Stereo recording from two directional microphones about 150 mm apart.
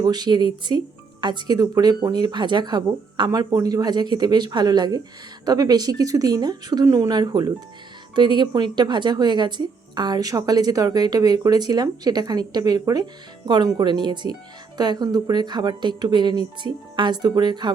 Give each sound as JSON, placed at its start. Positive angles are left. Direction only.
{"t": 0.0, "sound": "speech", "side_deg": -25}